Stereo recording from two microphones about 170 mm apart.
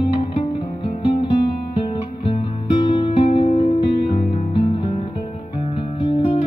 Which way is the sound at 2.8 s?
30° left (ahead or behind).